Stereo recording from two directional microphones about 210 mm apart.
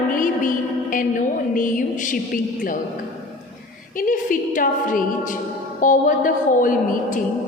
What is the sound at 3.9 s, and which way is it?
A woman's voice, 40° left (ahead or behind).